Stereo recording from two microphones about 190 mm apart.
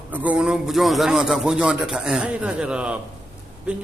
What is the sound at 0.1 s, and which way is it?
A man's voice, 10° right (ahead or behind).